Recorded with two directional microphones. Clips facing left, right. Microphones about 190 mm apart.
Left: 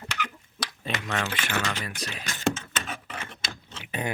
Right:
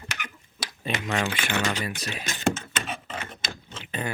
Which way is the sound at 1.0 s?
15° right (ahead or behind).